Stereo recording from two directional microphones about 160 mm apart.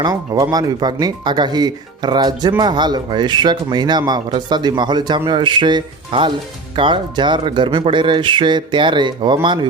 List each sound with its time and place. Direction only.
0.0 s speech: 25° right (ahead or behind)